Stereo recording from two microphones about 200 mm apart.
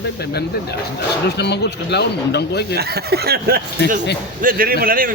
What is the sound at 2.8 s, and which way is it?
Speech, 50° right (ahead or behind).